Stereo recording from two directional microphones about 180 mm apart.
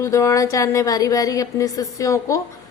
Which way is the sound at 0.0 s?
15° left (ahead or behind).